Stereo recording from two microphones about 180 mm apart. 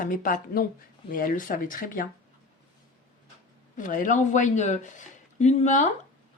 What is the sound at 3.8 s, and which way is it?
Speech, 45° left (ahead or behind).